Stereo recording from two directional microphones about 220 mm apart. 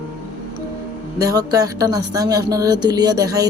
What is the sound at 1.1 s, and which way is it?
A woman's voice, 15° right (ahead or behind).